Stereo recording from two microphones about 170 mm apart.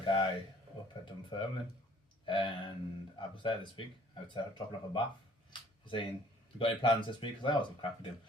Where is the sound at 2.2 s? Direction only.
30° left (ahead or behind).